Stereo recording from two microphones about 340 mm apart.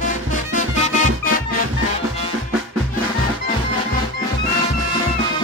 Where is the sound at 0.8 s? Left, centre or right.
Centre.